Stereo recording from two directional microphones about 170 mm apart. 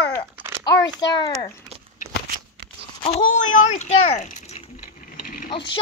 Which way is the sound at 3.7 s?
40° left (ahead or behind).